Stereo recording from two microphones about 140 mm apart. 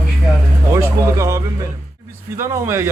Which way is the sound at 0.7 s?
20° right (ahead or behind).